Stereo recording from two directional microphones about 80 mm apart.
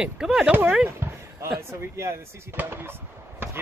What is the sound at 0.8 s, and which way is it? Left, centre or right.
Basketball bounce, right.